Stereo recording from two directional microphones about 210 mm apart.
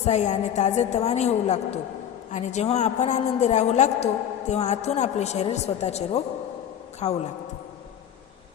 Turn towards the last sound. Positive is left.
turn(degrees=30)  # may be behind; listen again after turning